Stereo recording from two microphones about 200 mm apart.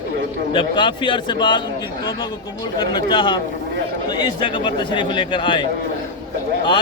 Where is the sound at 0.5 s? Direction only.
25° left (ahead or behind).